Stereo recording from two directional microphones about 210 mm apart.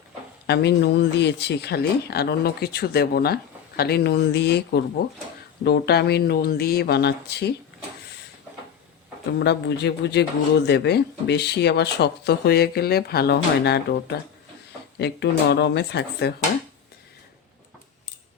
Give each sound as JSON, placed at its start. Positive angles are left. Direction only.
{"t": 0.4, "sound": "speech", "side_deg": 55}
{"t": 9.4, "sound": "speech", "side_deg": 55}